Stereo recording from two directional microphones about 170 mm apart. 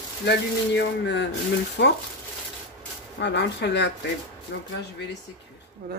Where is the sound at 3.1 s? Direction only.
85° left.